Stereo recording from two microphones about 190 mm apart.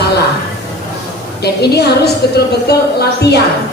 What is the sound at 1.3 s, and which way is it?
Music, 60° left (ahead or behind).